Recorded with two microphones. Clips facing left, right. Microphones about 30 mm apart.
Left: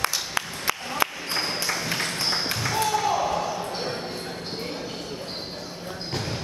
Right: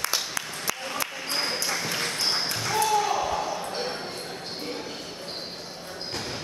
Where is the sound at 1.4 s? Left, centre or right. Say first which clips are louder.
Left 1 dB; centre.